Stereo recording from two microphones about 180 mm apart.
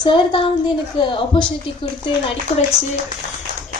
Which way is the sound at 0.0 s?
25° left (ahead or behind).